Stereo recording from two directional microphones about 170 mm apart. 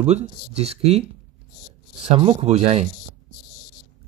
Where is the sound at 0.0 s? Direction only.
40° right (ahead or behind).